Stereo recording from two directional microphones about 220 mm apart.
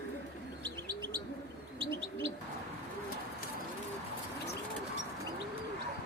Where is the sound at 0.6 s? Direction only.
20° right (ahead or behind).